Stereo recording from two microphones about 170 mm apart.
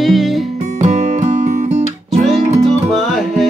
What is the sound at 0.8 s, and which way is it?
Music, 45° right (ahead or behind).